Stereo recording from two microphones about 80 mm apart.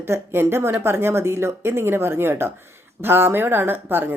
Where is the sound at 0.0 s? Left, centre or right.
Right.